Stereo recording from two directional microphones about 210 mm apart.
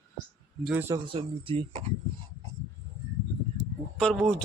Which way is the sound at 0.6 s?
10° right (ahead or behind).